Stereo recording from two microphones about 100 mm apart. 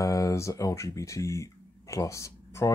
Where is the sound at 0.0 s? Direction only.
35° left (ahead or behind).